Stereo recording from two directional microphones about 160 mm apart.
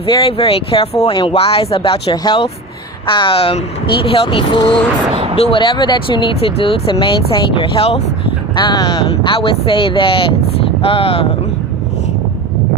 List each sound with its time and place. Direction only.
0.0 s speech: 35° left (ahead or behind)
5.1 s a sound: 35° right (ahead or behind)
5.4 s speech: 35° left (ahead or behind)
8.5 s speech: 25° left (ahead or behind)